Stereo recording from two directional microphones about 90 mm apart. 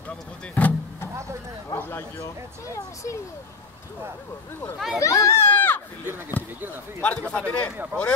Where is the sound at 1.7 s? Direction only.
25° left (ahead or behind).